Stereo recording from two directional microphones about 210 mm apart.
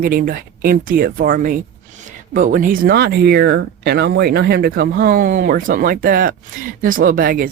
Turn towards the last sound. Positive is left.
turn(degrees=-40)  # may be behind; listen again after turning